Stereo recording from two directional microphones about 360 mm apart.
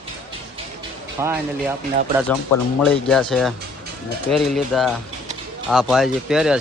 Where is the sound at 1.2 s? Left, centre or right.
Centre.